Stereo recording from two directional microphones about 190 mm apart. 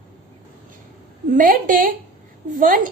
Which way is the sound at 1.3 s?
45° right (ahead or behind).